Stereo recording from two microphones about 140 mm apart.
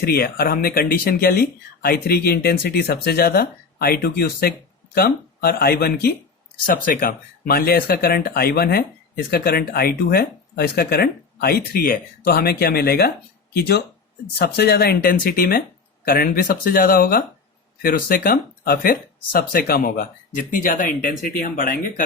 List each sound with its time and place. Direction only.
0.0 s speech: 90° left
14.8 s speech: 90° left; by 22.0 s 75° left (ahead or behind)